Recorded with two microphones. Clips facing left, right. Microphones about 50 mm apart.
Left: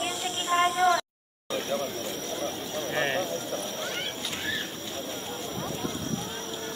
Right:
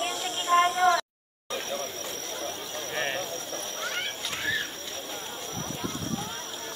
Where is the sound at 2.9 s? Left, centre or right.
Centre.